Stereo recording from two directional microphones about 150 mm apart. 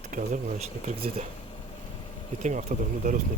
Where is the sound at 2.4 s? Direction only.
50° right (ahead or behind).